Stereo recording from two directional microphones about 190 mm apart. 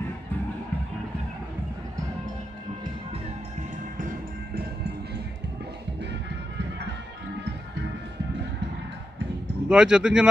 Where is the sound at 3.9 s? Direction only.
50° right (ahead or behind).